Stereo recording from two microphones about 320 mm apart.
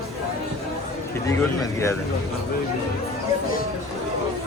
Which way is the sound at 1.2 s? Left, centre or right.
Centre.